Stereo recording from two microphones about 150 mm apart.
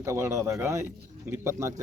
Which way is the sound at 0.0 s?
20° right (ahead or behind).